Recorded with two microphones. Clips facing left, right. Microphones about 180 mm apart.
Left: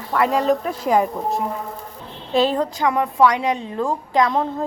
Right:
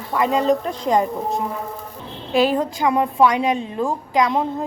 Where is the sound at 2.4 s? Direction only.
20° right (ahead or behind).